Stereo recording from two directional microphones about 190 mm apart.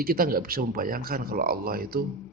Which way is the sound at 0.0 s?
50° right (ahead or behind).